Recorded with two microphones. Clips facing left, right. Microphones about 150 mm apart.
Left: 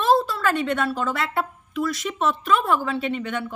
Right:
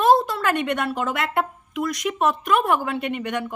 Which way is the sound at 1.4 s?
20° right (ahead or behind).